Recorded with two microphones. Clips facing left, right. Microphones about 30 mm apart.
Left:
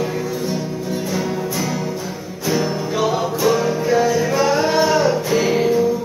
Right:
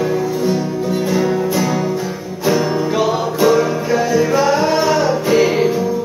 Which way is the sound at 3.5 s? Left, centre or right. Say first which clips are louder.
Right 2 dB; centre.